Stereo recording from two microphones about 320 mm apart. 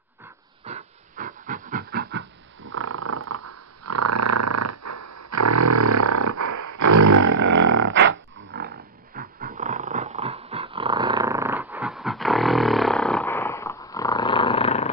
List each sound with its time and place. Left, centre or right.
0.6 s a sound: right
2.6 s purr: right
7.9 s roaring cats: right
9.1 s dog: right; by 14.8 s centre